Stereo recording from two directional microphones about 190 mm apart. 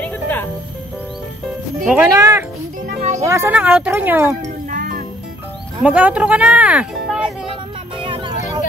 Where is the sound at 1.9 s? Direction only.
10° right (ahead or behind).